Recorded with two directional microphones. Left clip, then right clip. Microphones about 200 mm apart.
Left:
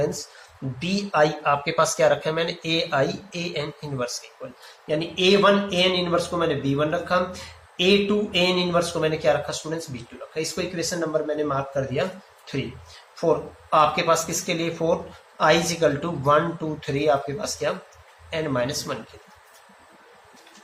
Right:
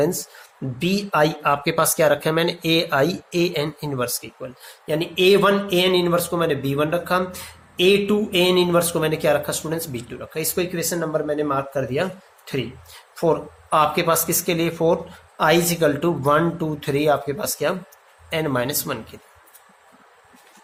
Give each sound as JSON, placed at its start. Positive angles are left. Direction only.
{"t": 0.8, "sound": "speech", "side_deg": -50}
{"t": 13.1, "sound": "speech", "side_deg": -50}